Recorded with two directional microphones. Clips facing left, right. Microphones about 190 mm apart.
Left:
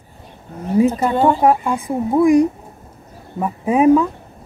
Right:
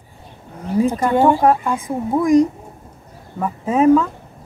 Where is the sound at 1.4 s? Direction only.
10° left (ahead or behind).